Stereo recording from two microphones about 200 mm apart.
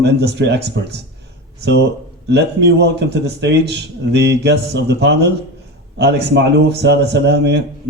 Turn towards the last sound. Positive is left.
turn(degrees=-60)  # may be behind; listen again after turning